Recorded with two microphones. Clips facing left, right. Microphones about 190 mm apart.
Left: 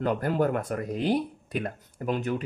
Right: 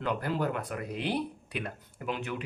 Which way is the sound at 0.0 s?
45° left (ahead or behind).